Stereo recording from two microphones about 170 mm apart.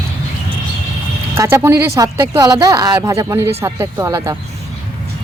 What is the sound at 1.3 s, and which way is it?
Speech, 15° right (ahead or behind).